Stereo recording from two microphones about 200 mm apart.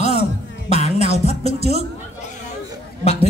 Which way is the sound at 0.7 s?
35° left (ahead or behind).